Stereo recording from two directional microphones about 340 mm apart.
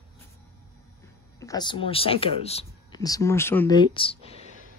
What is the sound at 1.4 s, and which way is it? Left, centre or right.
Speech, centre.